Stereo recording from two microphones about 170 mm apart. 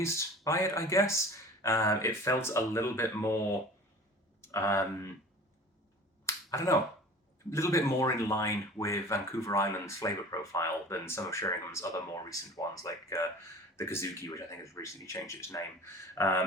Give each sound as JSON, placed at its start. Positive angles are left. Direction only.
{"t": 0.0, "sound": "speech", "side_deg": 15}
{"t": 4.4, "sound": "a sound", "side_deg": 15}
{"t": 6.2, "sound": "finger snapping", "side_deg": 15}
{"t": 7.5, "sound": "speech", "side_deg": 15}